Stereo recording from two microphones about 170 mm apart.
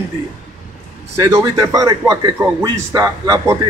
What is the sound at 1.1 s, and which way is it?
A man's voice, 15° right (ahead or behind).